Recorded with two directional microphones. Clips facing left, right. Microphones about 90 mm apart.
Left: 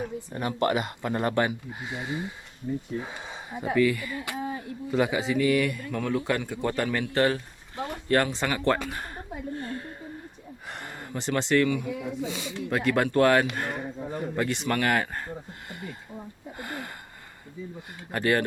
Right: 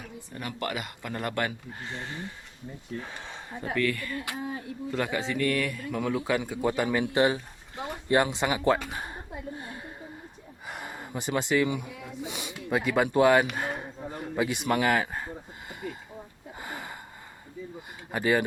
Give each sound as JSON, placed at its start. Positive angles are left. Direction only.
{"t": 0.0, "sound": "speech", "side_deg": 30}
{"t": 1.8, "sound": "a sound", "side_deg": 10}
{"t": 2.7, "sound": "speech", "side_deg": -15}
{"t": 3.0, "sound": "a man's voice", "side_deg": 15}
{"t": 9.6, "sound": "a sound", "side_deg": -10}
{"t": 11.7, "sound": "speech", "side_deg": -20}
{"t": 12.7, "sound": "a man's voice", "side_deg": -5}
{"t": 16.6, "sound": "a sound", "side_deg": -5}
{"t": 18.1, "sound": "a man's voice", "side_deg": -5}